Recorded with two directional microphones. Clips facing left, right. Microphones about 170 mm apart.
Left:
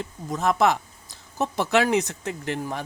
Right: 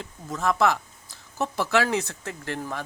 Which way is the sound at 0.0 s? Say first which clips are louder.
Left 2 dB; 20° left (ahead or behind).